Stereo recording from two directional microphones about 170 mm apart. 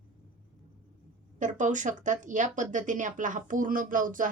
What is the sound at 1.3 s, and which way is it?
Speech, 45° right (ahead or behind).